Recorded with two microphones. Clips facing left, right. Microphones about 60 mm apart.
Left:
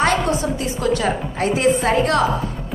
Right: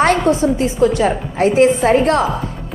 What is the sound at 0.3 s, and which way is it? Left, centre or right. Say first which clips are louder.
A woman's voice: right 7 dB; right.